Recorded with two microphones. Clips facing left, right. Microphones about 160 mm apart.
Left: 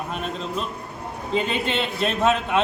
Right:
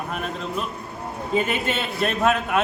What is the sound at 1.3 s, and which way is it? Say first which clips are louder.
Speech: even; 5° right (ahead or behind).